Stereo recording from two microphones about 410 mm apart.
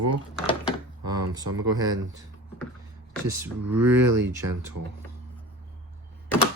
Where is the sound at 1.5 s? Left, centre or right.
Right.